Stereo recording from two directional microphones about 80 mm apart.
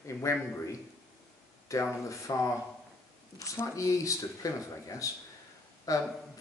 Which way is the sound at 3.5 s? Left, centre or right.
Left.